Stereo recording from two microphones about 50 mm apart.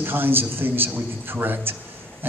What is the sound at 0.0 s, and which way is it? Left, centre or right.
A man's voice, right.